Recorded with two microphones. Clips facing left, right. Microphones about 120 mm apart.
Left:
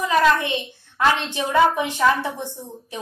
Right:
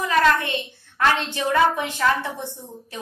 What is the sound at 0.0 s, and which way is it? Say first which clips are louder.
A woman's voice: left 1 dB; 15° left (ahead or behind).